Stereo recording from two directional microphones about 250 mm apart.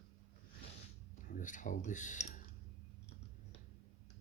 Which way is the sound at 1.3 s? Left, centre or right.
Left.